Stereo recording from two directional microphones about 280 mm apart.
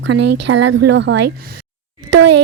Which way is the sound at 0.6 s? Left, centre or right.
Right.